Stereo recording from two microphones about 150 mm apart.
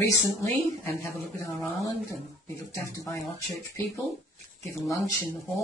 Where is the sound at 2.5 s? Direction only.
20° left (ahead or behind).